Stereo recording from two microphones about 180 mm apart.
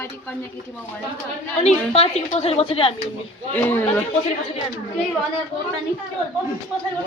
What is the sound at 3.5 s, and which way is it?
Speech, 10° left (ahead or behind).